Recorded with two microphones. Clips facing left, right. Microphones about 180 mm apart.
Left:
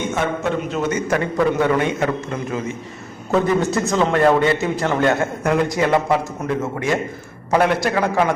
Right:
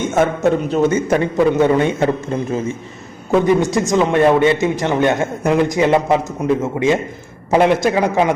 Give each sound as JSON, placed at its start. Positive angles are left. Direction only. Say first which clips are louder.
{"t": 0.1, "sound": "a man's voice", "louder": "right 6 dB", "side_deg": -45}
{"t": 0.9, "sound": "a man's voice", "louder": "right 4 dB", "side_deg": -25}
{"t": 3.3, "sound": "a man's voice", "louder": "right 4 dB", "side_deg": -15}